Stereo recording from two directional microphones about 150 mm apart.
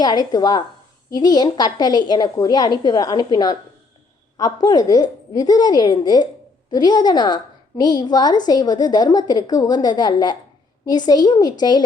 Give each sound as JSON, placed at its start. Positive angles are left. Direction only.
{"t": 0.0, "sound": "a woman's voice", "side_deg": 25}
{"t": 4.6, "sound": "a woman's voice", "side_deg": 30}